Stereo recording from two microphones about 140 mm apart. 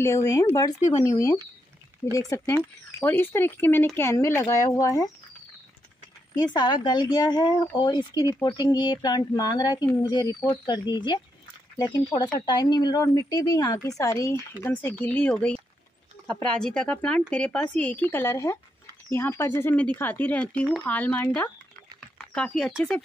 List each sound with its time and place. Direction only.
0.0 s speech: 20° left (ahead or behind)
6.3 s speech: 30° left (ahead or behind)
14.6 s speech: 15° left (ahead or behind)